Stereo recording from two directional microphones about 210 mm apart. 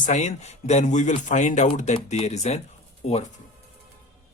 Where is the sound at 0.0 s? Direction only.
35° left (ahead or behind).